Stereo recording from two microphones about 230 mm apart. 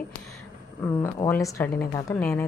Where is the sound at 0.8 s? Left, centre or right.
Centre.